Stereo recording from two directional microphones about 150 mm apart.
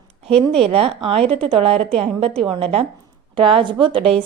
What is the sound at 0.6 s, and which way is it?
A woman's voice, 40° right (ahead or behind).